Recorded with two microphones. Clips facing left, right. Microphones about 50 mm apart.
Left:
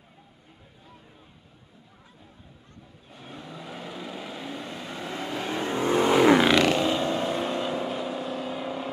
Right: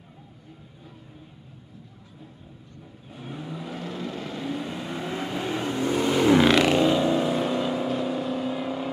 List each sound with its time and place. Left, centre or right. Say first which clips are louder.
3.1 s vehicle: right 5 dB; centre
5.7 s vehicle: left 3 dB; left
6.3 s vehicle: right 1 dB; centre